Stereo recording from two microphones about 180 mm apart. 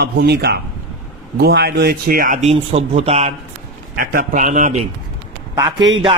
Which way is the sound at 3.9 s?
55° right (ahead or behind).